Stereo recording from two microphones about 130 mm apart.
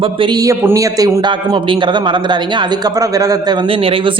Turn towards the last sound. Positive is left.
turn(degrees=-45)  # may be behind; listen again after turning